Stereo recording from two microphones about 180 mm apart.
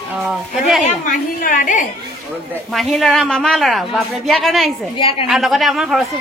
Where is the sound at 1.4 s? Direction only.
45° left (ahead or behind).